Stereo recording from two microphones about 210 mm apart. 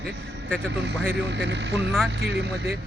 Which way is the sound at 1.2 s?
55° right (ahead or behind).